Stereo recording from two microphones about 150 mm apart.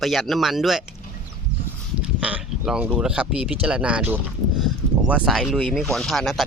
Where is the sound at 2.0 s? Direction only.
10° right (ahead or behind).